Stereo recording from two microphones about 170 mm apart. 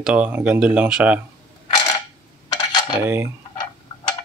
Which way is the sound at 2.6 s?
25° left (ahead or behind).